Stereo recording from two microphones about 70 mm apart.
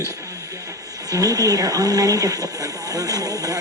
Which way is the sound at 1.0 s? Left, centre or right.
Right.